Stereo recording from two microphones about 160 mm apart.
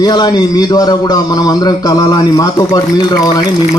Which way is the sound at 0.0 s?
25° left (ahead or behind).